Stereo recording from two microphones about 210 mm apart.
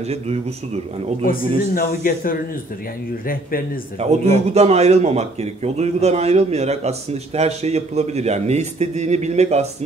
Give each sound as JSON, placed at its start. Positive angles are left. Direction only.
{"t": 0.0, "sound": "speech", "side_deg": -30}
{"t": 1.2, "sound": "speech", "side_deg": 40}
{"t": 4.0, "sound": "a man's voice", "side_deg": -30}